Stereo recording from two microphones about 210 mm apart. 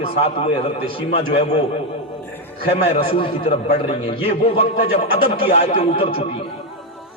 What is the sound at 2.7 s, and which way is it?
A man's voice, 30° left (ahead or behind).